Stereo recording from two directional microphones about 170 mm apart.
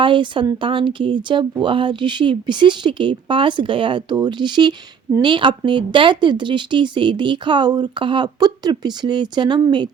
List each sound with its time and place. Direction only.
0.0 s speech: 30° right (ahead or behind)